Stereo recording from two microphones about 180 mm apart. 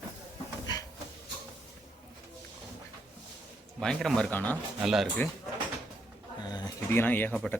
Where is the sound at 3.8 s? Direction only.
Centre (ahead or behind).